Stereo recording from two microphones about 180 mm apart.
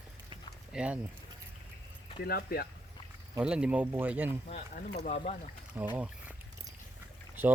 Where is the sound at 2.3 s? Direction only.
60° left (ahead or behind).